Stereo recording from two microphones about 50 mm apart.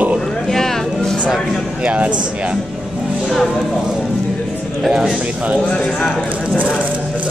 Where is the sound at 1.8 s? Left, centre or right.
Right.